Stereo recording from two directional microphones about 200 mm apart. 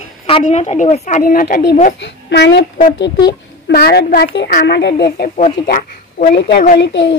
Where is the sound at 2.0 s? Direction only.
60° left (ahead or behind).